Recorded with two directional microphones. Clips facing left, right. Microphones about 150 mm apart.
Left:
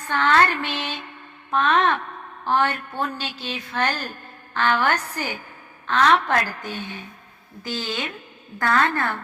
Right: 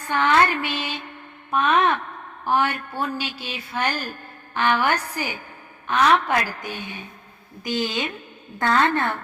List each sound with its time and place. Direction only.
0.1 s speech: 10° right (ahead or behind)
2.4 s a sound: 10° right (ahead or behind)
3.2 s a woman's voice: 10° right (ahead or behind)